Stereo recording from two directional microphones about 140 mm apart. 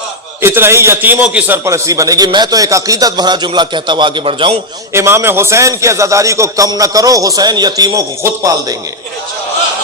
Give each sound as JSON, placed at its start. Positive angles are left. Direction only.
{"t": 0.4, "sound": "a man's voice", "side_deg": -15}
{"t": 1.6, "sound": "speech", "side_deg": -20}
{"t": 4.9, "sound": "a man's voice", "side_deg": -20}